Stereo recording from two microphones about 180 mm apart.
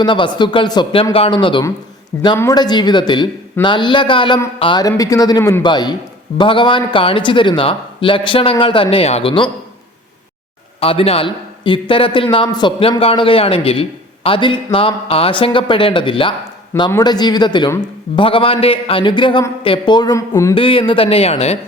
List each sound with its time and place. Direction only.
0.0 s a man's voice: 25° left (ahead or behind)
10.8 s a man's voice: 30° left (ahead or behind); by 20.6 s 15° left (ahead or behind)
20.6 s speech: 30° left (ahead or behind)